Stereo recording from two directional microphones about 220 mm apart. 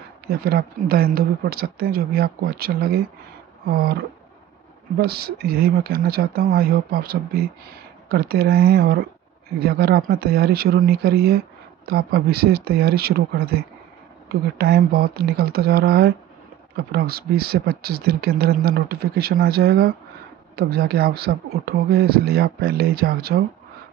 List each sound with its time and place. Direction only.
0.3 s speech: 45° right (ahead or behind)